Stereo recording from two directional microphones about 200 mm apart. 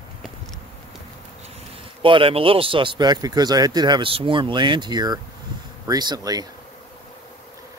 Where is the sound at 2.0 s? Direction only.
25° right (ahead or behind).